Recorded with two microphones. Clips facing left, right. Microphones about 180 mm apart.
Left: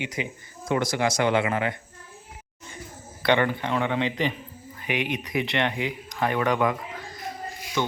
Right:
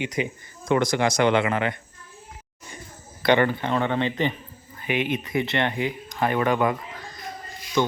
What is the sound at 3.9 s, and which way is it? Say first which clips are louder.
Speech: right 2 dB; 5° left (ahead or behind).